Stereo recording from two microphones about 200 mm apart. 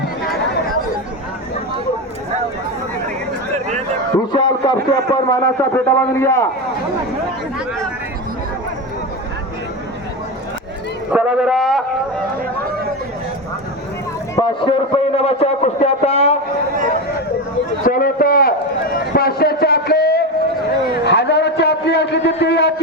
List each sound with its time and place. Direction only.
4.3 s a man's voice: 20° left (ahead or behind)
11.1 s a man's voice: 5° right (ahead or behind)
14.3 s a man's voice: 25° left (ahead or behind)
17.8 s a sound: 45° left (ahead or behind)
21.0 s a man's voice: 60° left (ahead or behind)